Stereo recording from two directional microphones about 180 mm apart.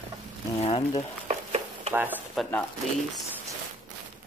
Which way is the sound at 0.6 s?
30° left (ahead or behind).